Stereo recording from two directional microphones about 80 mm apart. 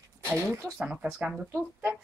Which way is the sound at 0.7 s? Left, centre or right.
Centre.